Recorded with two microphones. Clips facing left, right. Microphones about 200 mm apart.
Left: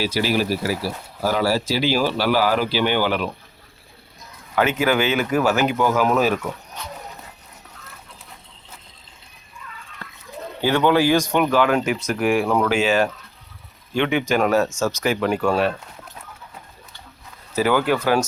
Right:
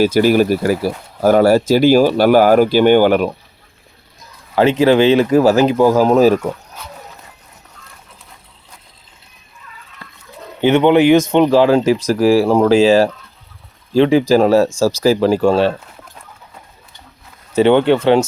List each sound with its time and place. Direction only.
0.0 s speech: 50° right (ahead or behind)
4.5 s speech: 30° right (ahead or behind)
10.6 s speech: 20° right (ahead or behind)
17.5 s speech: 25° right (ahead or behind)